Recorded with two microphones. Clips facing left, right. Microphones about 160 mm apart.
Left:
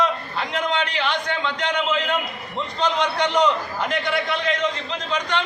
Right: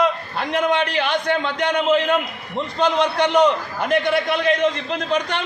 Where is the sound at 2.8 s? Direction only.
55° right (ahead or behind).